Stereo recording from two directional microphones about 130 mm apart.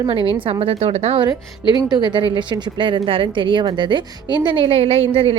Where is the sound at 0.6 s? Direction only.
50° right (ahead or behind).